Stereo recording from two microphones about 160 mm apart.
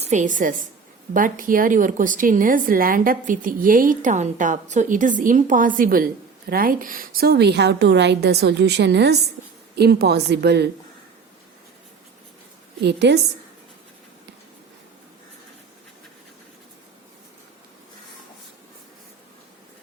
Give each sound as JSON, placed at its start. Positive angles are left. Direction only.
{"t": 0.0, "sound": "a woman's voice", "side_deg": -50}
{"t": 12.8, "sound": "a woman's voice", "side_deg": -90}